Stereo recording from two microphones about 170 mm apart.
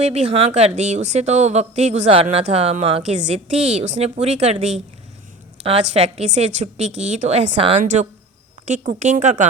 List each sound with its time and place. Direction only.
0.0 s speech: 40° right (ahead or behind)
5.9 s a woman's voice: 40° right (ahead or behind)